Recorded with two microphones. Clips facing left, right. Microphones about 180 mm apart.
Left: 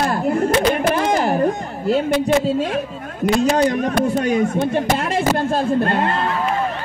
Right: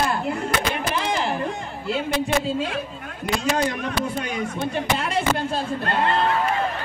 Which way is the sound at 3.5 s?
40° left (ahead or behind).